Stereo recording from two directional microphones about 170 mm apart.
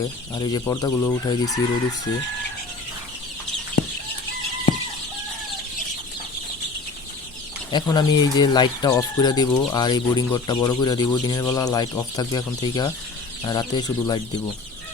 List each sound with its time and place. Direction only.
0.3 s speech: 25° left (ahead or behind)
7.7 s speech: 25° left (ahead or behind)